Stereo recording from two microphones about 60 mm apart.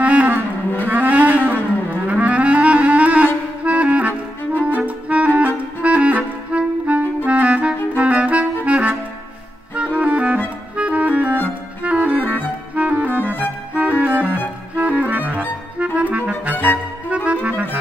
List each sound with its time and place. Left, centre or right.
0.0 s music: right
2.0 s clarinet: right
8.0 s music: right
9.8 s clarinet: right
11.8 s music: right
12.7 s clarinet: right
13.2 s music: left
13.7 s music: right